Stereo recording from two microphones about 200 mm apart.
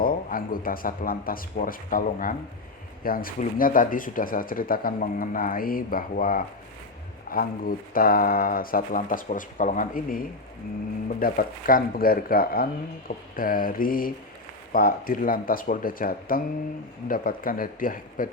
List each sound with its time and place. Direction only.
0.0 s speech: 45° left (ahead or behind)